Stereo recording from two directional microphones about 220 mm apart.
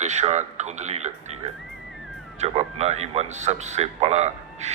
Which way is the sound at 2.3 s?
30° right (ahead or behind).